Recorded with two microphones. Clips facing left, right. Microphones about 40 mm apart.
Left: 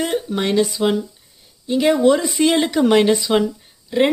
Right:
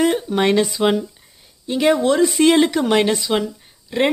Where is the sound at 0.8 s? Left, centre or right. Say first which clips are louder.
Right 2 dB; right.